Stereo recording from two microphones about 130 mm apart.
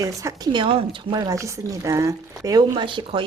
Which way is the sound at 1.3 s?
25° right (ahead or behind).